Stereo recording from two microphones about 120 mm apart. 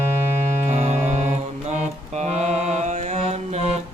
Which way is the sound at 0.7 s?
75° right (ahead or behind).